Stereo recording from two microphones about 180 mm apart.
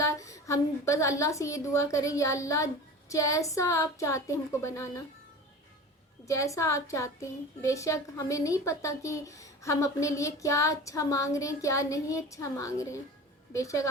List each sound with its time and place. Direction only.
0.0 s a woman's voice: 15° left (ahead or behind)
6.2 s a woman's voice: 15° left (ahead or behind)